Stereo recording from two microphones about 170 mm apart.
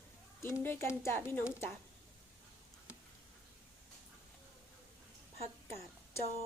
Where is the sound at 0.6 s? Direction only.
15° left (ahead or behind).